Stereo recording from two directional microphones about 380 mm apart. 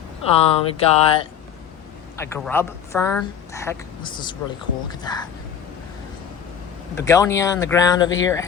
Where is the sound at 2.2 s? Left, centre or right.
Centre.